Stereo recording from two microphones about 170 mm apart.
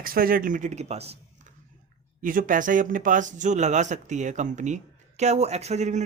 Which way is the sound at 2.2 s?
50° right (ahead or behind).